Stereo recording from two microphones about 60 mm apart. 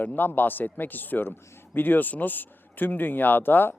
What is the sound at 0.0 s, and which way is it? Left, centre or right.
Speech, left.